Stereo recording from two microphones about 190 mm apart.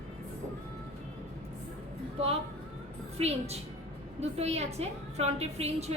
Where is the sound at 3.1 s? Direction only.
35° right (ahead or behind).